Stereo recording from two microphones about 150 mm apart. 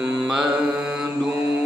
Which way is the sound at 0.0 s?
5° right (ahead or behind).